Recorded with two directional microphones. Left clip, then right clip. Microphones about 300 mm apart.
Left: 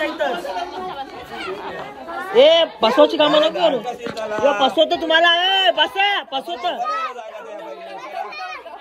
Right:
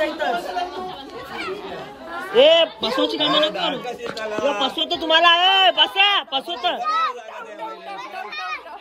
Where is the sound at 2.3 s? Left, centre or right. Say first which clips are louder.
Left 1 dB; centre.